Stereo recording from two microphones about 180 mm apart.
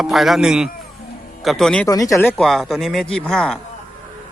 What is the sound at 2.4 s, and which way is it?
A man's voice, centre (ahead or behind).